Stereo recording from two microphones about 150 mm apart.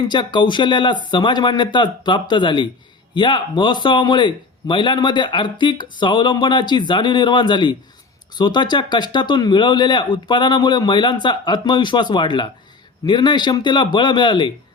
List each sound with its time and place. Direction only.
0.1 s a man's voice: 30° left (ahead or behind)